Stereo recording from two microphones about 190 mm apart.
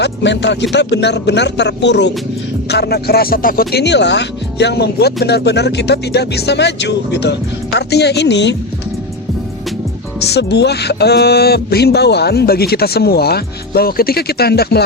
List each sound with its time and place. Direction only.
0.0 s speech: 65° left (ahead or behind)
10.2 s speech: 60° left (ahead or behind)